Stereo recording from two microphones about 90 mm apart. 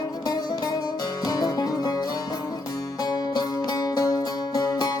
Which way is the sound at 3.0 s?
45° left (ahead or behind).